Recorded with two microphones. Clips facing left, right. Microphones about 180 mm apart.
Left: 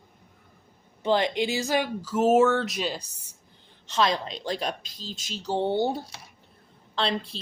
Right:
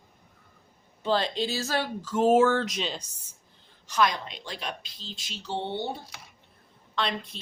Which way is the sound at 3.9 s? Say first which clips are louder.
Left 1 dB; 25° left (ahead or behind).